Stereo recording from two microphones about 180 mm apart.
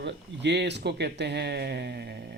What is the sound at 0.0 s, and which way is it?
Speech, 70° right (ahead or behind).